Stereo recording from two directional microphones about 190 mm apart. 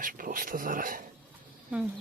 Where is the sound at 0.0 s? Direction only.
45° right (ahead or behind).